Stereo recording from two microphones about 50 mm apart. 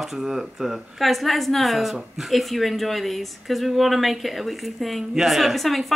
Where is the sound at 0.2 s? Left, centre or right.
Centre.